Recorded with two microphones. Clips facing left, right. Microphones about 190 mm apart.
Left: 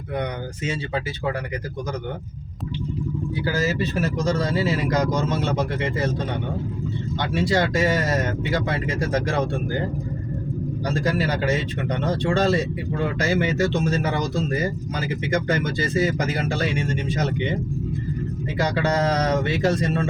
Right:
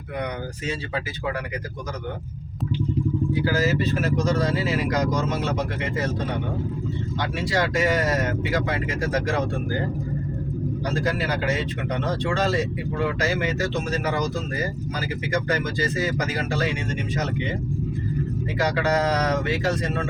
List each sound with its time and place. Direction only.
4.3 s speech: 25° left (ahead or behind)
7.3 s speech: 30° left (ahead or behind)
12.2 s speech: 30° left (ahead or behind)
15.3 s speech: 25° left (ahead or behind)
18.8 s speech: 25° left (ahead or behind)